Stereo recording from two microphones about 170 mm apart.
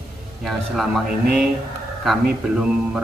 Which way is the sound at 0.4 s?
Centre (ahead or behind).